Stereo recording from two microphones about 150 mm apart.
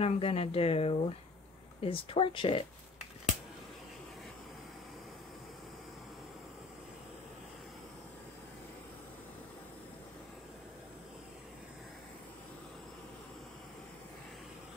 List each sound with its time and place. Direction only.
0.0 s speech: 40° left (ahead or behind)